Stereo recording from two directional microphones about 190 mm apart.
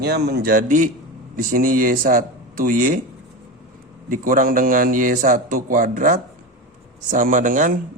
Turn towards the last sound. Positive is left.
turn(degrees=-45)  # may be behind; listen again after turning